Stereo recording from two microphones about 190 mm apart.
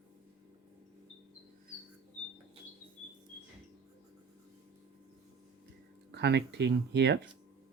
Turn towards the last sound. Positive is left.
turn(degrees=-65)  # may be behind; listen again after turning